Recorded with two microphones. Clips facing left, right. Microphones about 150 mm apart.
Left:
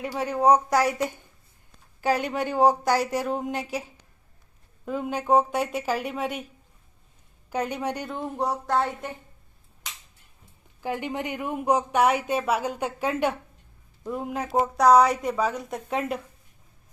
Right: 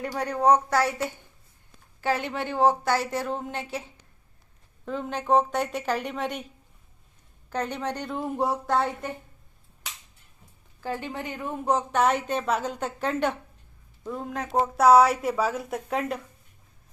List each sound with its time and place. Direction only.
0.0 s a woman's voice: 5° left (ahead or behind)
2.0 s a woman's voice: 15° left (ahead or behind)
4.9 s a woman's voice: 10° left (ahead or behind)
7.5 s a woman's voice: 10° left (ahead or behind)
8.1 s a woman's voice: 5° right (ahead or behind)
10.8 s a woman's voice: 15° left (ahead or behind)
14.6 s a woman's voice: 5° right (ahead or behind)